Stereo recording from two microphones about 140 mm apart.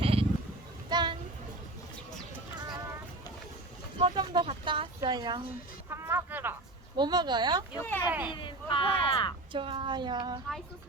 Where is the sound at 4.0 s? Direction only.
40° right (ahead or behind).